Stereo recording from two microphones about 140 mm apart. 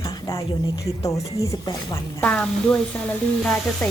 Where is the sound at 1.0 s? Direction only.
20° left (ahead or behind).